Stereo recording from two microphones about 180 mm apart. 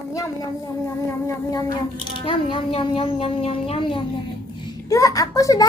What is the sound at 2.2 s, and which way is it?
Speech, 30° left (ahead or behind).